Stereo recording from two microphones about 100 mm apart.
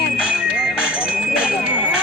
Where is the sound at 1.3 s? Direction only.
10° right (ahead or behind).